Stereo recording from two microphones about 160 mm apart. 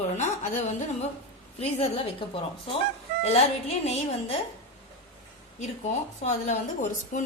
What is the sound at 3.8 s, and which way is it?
Speech, 40° left (ahead or behind).